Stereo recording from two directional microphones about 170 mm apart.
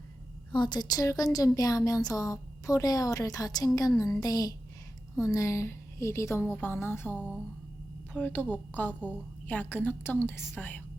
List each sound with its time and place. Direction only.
0.5 s a woman's voice: 25° left (ahead or behind)